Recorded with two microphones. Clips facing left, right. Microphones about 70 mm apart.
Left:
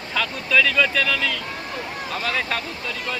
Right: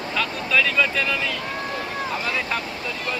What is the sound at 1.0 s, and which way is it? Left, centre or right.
Speech, left.